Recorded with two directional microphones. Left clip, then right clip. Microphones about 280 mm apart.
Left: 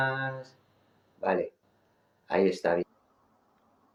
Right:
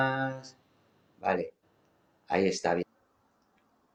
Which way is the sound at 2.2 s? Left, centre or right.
Centre.